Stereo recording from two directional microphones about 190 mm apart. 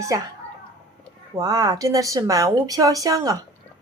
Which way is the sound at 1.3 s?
20° right (ahead or behind).